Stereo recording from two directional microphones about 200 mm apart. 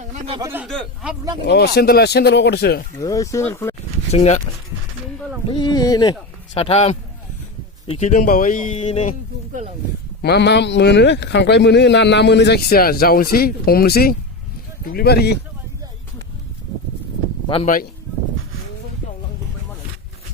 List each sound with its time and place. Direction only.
0.0 s a sound: 35° right (ahead or behind)
0.3 s speech: 10° right (ahead or behind)
0.7 s speech: centre (ahead or behind)
1.5 s speech: 55° left (ahead or behind)
3.0 s speech: 15° left (ahead or behind)
4.1 s speech: 35° left (ahead or behind)
5.5 s speech: 20° left (ahead or behind)
6.5 s speech: 30° left (ahead or behind)
10.2 s a man's voice: 55° left (ahead or behind)
17.5 s speech: 30° left (ahead or behind)